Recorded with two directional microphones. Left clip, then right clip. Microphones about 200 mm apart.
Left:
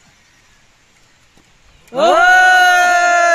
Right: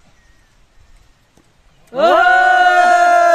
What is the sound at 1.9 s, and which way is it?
Speech, 35° left (ahead or behind).